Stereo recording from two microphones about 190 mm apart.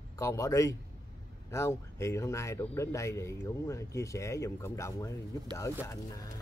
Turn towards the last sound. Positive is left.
turn(degrees=15)  # may be behind; listen again after turning